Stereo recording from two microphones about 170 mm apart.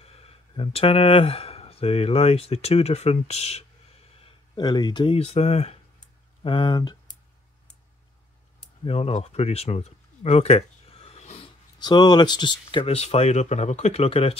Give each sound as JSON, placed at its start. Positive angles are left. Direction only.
{"t": 0.0, "sound": "speech", "side_deg": 35}
{"t": 4.2, "sound": "speech", "side_deg": 25}
{"t": 8.8, "sound": "speech", "side_deg": 35}
{"t": 11.8, "sound": "speech", "side_deg": 25}